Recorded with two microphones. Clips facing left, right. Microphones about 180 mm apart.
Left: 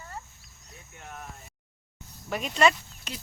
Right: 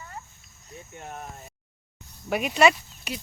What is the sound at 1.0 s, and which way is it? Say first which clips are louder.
Speech: right 4 dB; 35° right (ahead or behind).